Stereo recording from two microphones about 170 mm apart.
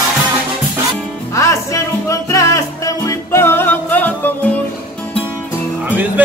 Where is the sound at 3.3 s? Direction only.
15° left (ahead or behind).